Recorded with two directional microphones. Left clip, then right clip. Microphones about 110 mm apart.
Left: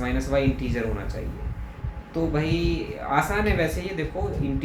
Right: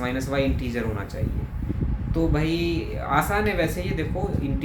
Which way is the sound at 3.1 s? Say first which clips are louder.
Right 1 dB; 25° right (ahead or behind).